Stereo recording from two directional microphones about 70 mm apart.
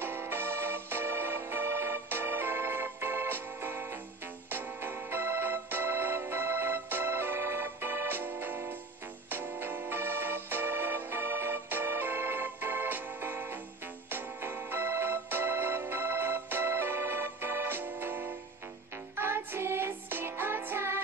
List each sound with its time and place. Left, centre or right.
0.0 s music: right
4.5 s organ: right
9.3 s music: right